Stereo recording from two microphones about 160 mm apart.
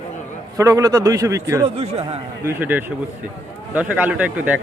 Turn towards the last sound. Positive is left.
turn(degrees=-10)  # may be behind; listen again after turning